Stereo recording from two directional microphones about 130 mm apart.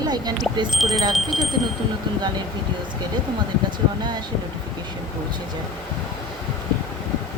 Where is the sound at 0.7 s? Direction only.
Centre (ahead or behind).